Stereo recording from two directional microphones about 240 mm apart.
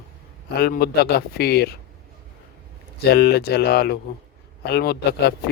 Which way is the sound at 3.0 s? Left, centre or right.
Left.